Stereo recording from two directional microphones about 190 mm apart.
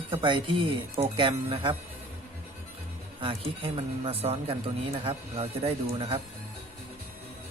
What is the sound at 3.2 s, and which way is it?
Speech, 30° right (ahead or behind).